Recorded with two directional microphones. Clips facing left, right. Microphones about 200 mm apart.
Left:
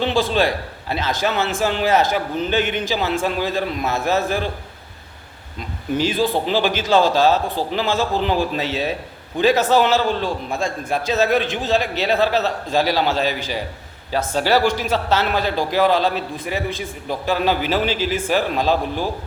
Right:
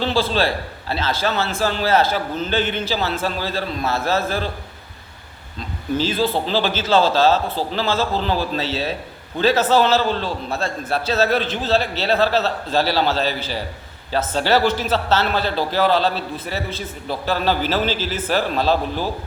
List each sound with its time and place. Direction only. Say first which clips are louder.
0.0 s a man's voice: left 1 dB; 15° left (ahead or behind)
6.0 s a man's voice: left 1 dB; 15° left (ahead or behind)